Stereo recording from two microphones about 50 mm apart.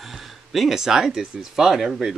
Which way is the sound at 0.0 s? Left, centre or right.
Centre.